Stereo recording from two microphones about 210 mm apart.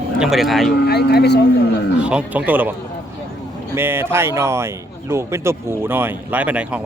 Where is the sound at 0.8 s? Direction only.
50° left (ahead or behind).